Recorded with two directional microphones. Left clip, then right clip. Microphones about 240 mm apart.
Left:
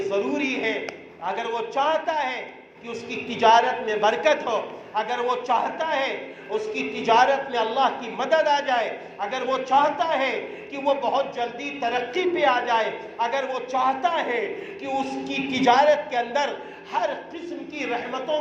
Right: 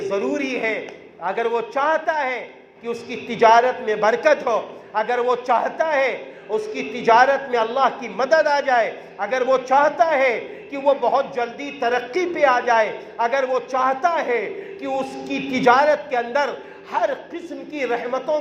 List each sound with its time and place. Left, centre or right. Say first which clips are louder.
0.0 s a man's voice: right 2 dB; right